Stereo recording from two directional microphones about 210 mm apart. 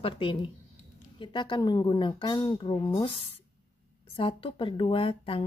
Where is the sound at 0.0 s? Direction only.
25° left (ahead or behind).